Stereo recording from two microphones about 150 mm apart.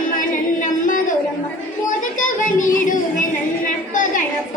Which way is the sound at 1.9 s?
60° left (ahead or behind).